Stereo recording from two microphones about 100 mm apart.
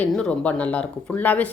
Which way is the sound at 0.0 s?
15° left (ahead or behind).